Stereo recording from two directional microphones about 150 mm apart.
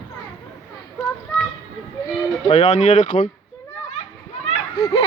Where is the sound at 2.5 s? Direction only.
50° left (ahead or behind).